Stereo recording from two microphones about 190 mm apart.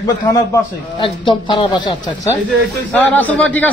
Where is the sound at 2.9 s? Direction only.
10° left (ahead or behind).